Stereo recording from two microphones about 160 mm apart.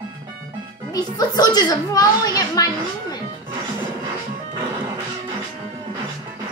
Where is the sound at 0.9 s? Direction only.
25° left (ahead or behind).